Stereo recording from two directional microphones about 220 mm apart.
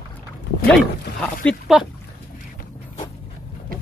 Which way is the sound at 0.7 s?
5° left (ahead or behind).